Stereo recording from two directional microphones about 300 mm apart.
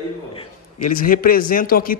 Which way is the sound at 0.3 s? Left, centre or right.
Left.